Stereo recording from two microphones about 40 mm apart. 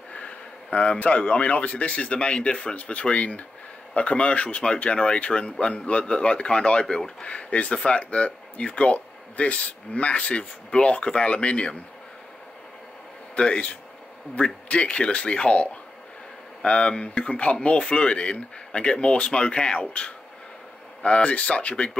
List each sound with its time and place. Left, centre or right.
0.1 s speech: left
13.4 s speech: left